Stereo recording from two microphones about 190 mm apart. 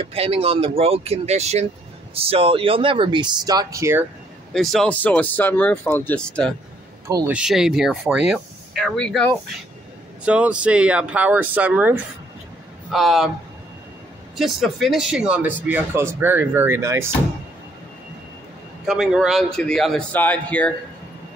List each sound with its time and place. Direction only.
0.0 s speech: 30° right (ahead or behind); by 4.0 s 15° right (ahead or behind)
4.6 s speech: centre (ahead or behind)
7.1 s speech: 20° right (ahead or behind)
7.3 s speech: 5° right (ahead or behind)
10.2 s speech: 5° right (ahead or behind)
14.3 s speech: centre (ahead or behind)
18.9 s speech: centre (ahead or behind)